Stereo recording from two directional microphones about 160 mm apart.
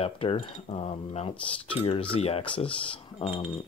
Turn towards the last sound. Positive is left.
turn(degrees=35)  # may be behind; listen again after turning